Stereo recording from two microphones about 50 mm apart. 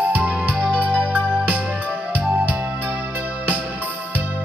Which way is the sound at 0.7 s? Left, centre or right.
Left.